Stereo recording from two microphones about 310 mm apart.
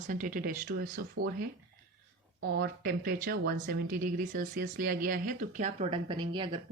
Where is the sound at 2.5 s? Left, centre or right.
Right.